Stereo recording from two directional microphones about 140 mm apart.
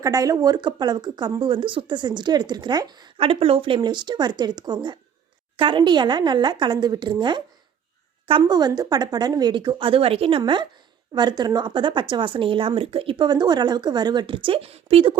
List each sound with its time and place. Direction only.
0.0 s speech: 25° right (ahead or behind); by 15.2 s 40° right (ahead or behind)